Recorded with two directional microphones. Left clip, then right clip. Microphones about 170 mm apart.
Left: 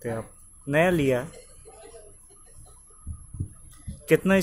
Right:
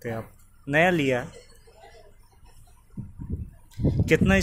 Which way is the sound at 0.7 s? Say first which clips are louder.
Even; 5° left (ahead or behind).